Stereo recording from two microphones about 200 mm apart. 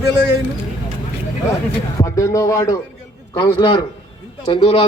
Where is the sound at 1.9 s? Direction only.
15° left (ahead or behind).